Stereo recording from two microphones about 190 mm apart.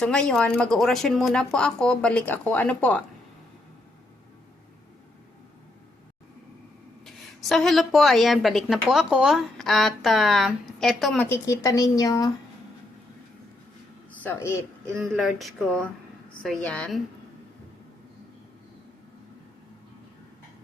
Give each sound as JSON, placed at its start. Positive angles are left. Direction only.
{"t": 0.0, "sound": "a woman's voice", "side_deg": 5}
{"t": 7.0, "sound": "a woman's voice", "side_deg": 0}
{"t": 11.3, "sound": "a woman's voice", "side_deg": 15}
{"t": 14.2, "sound": "speech", "side_deg": 10}
{"t": 15.1, "sound": "a woman's voice", "side_deg": 0}